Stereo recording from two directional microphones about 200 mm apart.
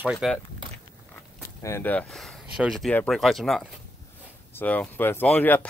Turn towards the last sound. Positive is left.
turn(degrees=10)  # may be behind; listen again after turning